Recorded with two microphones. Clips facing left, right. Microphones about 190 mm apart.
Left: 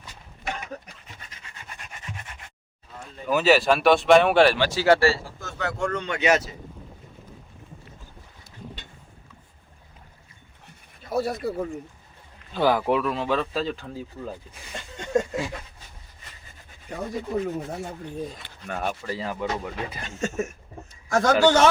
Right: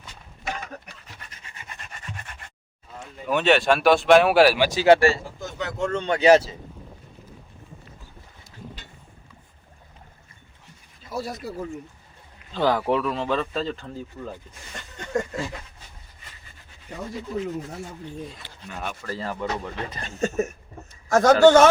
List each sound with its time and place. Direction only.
1.6 s rub: centre (ahead or behind)
3.2 s speech: centre (ahead or behind); by 6.6 s 30° right (ahead or behind)
10.7 s a sound: 60° left (ahead or behind)
12.5 s speech: 10° left (ahead or behind)
14.9 s chuckle: 25° left (ahead or behind)
16.9 s speech: 55° left (ahead or behind)
19.0 s speech: 10° left (ahead or behind)
20.1 s a man's voice: 35° right (ahead or behind)